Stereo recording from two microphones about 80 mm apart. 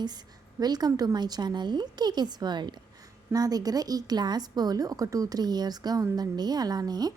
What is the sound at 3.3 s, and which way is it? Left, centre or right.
Speech, right.